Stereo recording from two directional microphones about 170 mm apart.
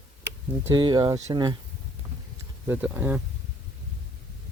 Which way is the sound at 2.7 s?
10° right (ahead or behind).